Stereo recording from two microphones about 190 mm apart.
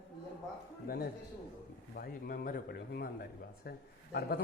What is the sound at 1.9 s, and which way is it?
A man's voice, 50° left (ahead or behind).